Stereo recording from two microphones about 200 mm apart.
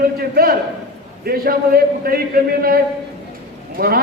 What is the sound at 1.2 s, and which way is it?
A man's voice, 50° right (ahead or behind).